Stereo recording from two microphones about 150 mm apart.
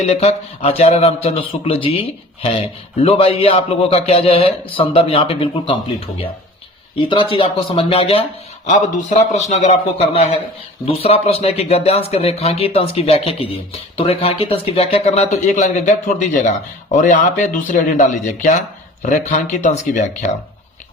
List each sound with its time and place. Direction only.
0.0 s a man's voice: 45° left (ahead or behind)
8.6 s a man's voice: 55° left (ahead or behind)
19.0 s speech: 55° left (ahead or behind)